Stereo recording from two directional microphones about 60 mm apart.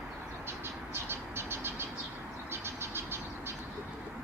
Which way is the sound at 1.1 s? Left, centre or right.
Right.